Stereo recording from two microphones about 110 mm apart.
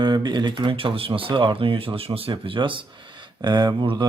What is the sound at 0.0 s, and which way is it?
Speech, 40° right (ahead or behind).